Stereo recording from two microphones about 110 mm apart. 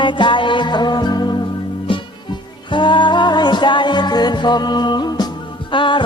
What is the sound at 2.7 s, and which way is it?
Music, 45° left (ahead or behind).